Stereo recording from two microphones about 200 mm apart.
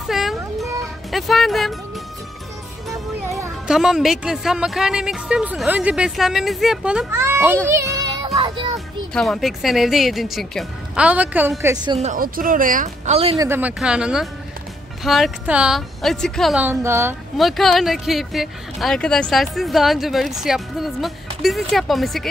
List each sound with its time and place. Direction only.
0.1 s a sound: centre (ahead or behind)
1.1 s speech: centre (ahead or behind)
3.3 s music: 15° right (ahead or behind)
3.6 s speech: centre (ahead or behind); by 8.3 s 20° right (ahead or behind)
8.4 s music: 25° right (ahead or behind)
8.7 s speech: centre (ahead or behind); by 12.0 s 20° right (ahead or behind)
12.0 s speech: 40° right (ahead or behind)
13.4 s speech: 10° right (ahead or behind)
17.4 s speech: centre (ahead or behind)